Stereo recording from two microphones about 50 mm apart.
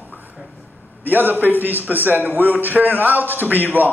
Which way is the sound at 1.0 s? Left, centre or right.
Right.